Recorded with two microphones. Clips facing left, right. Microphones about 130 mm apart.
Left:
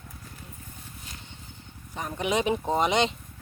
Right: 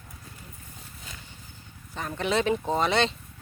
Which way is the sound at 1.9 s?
15° left (ahead or behind).